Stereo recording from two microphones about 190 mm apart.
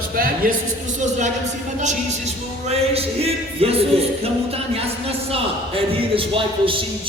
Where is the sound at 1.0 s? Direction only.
40° right (ahead or behind).